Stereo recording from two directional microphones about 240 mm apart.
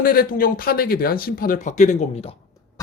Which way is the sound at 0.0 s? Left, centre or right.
Left.